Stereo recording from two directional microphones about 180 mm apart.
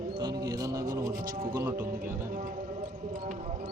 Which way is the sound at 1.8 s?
50° right (ahead or behind).